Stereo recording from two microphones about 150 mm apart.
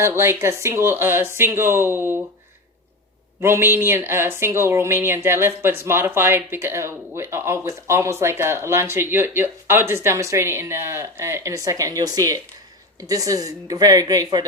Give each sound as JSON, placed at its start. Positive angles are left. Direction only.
{"t": 0.0, "sound": "speech", "side_deg": -15}
{"t": 3.4, "sound": "speech", "side_deg": -15}